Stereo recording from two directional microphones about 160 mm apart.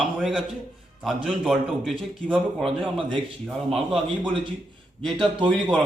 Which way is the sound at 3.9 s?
30° right (ahead or behind).